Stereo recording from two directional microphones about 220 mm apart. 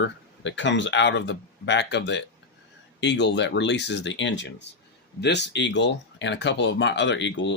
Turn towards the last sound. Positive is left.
turn(degrees=55)  # may be behind; listen again after turning